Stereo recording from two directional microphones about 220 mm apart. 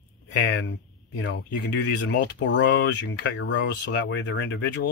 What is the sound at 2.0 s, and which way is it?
Speech, 55° left (ahead or behind).